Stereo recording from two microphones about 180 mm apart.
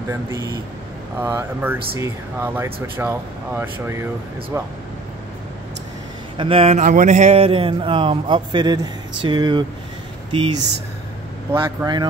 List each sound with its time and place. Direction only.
0.1 s speech: 15° right (ahead or behind)
6.3 s speech: 30° right (ahead or behind)